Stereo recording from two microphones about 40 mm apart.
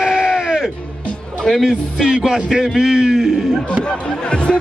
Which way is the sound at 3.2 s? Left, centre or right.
Centre.